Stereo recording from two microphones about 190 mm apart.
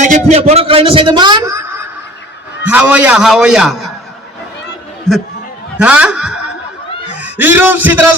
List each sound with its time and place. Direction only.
0.0 s a man's voice: 40° right (ahead or behind); by 3.8 s centre (ahead or behind)
5.8 s a man's voice: 5° right (ahead or behind)